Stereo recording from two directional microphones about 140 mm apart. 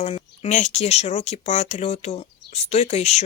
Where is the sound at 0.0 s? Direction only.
55° left (ahead or behind).